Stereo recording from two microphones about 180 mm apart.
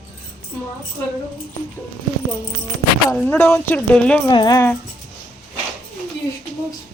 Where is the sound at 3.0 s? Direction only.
10° left (ahead or behind).